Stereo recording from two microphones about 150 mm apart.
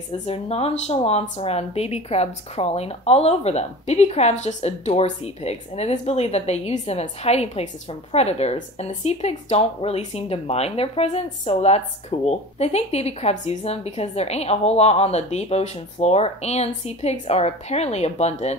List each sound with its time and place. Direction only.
0.3 s speech: 40° left (ahead or behind)